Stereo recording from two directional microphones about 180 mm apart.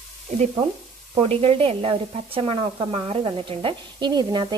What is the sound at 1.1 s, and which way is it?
A woman's voice, 30° right (ahead or behind).